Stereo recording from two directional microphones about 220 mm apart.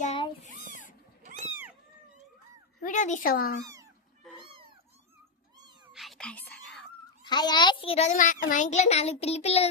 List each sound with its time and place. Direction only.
0.0 s a sound: 30° left (ahead or behind)
1.2 s cat: 30° right (ahead or behind)
2.8 s speech: 35° left (ahead or behind)
5.9 s whispering: centre (ahead or behind)
7.3 s a child's voice: 20° left (ahead or behind)